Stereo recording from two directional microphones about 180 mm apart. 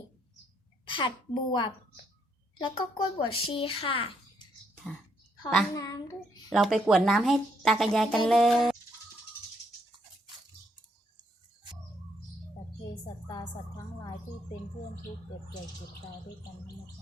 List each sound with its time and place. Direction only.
0.9 s speech: 25° left (ahead or behind)
5.7 s speech: 20° left (ahead or behind)
6.5 s a woman's voice: centre (ahead or behind)
12.9 s a sound: 25° left (ahead or behind)